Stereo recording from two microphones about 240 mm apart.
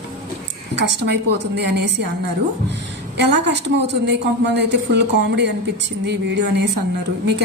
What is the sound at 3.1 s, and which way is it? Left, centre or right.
A woman's voice, right.